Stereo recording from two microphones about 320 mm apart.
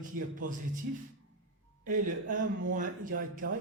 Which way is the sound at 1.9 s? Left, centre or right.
Right.